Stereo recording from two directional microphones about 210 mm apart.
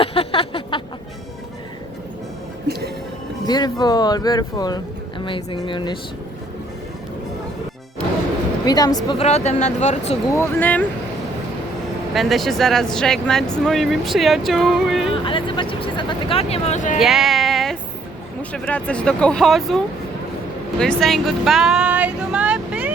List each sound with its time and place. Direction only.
0.0 s a sound: 25° left (ahead or behind)
3.4 s speech: 20° left (ahead or behind)
8.6 s speech: 20° left (ahead or behind)
10.3 s speech: 10° left (ahead or behind)
12.1 s speech: centre (ahead or behind)
15.1 s speech: 25° left (ahead or behind)
17.0 s music: centre (ahead or behind)
18.5 s speech: 5° left (ahead or behind)
20.7 s a sound: 5° left (ahead or behind)